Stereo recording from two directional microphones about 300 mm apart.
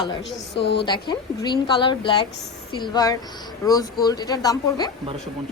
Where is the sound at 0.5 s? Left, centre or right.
Left.